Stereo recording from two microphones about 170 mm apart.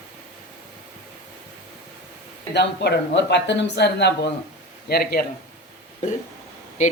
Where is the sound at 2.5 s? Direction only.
80° left.